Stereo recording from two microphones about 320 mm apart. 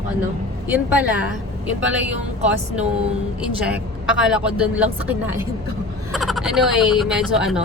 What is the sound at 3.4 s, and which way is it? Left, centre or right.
Speech, centre.